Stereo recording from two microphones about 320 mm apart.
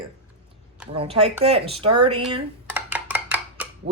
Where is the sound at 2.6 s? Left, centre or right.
Centre.